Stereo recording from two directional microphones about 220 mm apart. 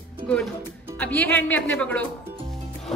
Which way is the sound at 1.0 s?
10° left (ahead or behind).